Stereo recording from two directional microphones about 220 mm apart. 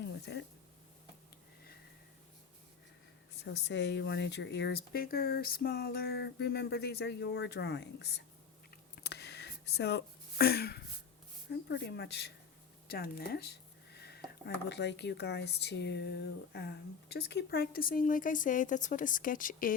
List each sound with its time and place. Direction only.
0.0 s a sound: 50° left (ahead or behind)
3.3 s speech: 50° left (ahead or behind)
8.7 s computer keyboard: 45° left (ahead or behind)
11.7 s speech: 50° left (ahead or behind)
12.9 s a sound: 45° left (ahead or behind)
14.4 s speech: 50° left (ahead or behind)